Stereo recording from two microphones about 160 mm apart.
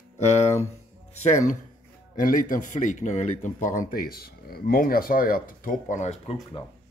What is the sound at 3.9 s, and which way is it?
Speech, 70° left (ahead or behind).